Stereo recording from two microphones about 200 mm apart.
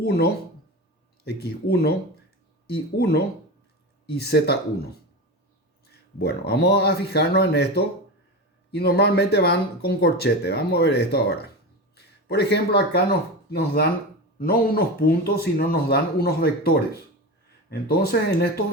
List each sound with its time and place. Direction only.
1.2 s speech: 55° left (ahead or behind)
2.9 s speech: 50° left (ahead or behind)
6.1 s speech: 55° left (ahead or behind)